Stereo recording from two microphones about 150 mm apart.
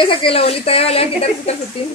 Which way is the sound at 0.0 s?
35° left (ahead or behind).